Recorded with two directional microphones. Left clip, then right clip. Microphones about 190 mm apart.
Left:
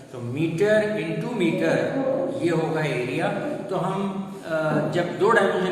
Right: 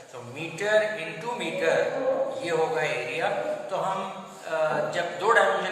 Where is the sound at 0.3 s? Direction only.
15° left (ahead or behind).